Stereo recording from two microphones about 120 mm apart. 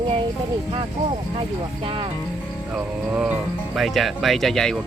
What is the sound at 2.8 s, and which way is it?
Speech, 10° right (ahead or behind).